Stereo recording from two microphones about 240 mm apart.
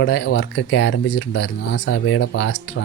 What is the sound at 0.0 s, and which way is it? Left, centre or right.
Speech, left.